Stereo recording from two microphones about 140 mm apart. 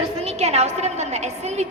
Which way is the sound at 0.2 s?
50° right (ahead or behind).